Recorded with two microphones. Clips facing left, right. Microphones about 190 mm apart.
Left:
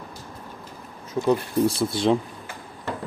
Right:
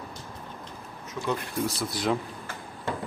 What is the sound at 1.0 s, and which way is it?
Speech, 30° left (ahead or behind).